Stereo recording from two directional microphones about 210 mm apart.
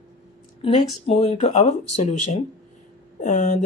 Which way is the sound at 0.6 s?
30° left (ahead or behind).